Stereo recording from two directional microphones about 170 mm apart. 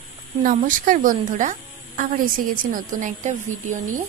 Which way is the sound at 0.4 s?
50° right (ahead or behind).